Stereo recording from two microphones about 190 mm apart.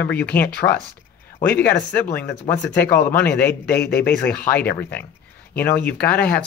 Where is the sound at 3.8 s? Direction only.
55° left (ahead or behind).